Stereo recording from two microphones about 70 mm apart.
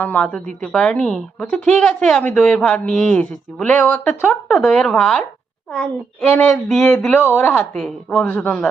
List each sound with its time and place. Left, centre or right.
0.0 s a woman's voice: left
4.6 s speech: centre
4.9 s a woman's voice: centre
6.5 s speech: centre
8.1 s a woman's voice: left